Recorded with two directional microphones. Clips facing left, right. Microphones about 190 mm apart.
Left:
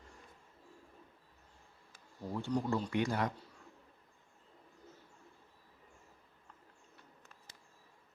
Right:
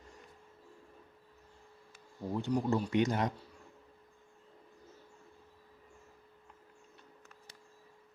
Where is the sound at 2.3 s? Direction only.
15° right (ahead or behind).